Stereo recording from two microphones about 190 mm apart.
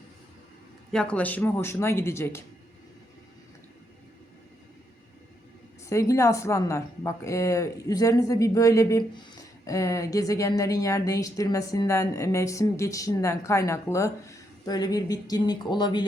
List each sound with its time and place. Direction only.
0.9 s a woman's voice: 5° left (ahead or behind)
5.8 s a woman's voice: 15° left (ahead or behind)